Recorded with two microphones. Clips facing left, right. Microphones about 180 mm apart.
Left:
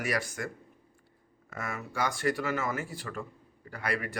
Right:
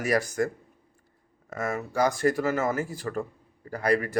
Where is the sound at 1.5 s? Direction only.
45° right (ahead or behind).